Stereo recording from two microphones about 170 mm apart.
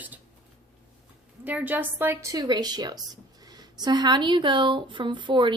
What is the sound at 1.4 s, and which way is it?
A woman's voice, 10° right (ahead or behind).